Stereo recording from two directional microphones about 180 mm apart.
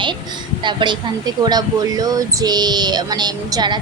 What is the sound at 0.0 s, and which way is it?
A woman's voice, 25° right (ahead or behind).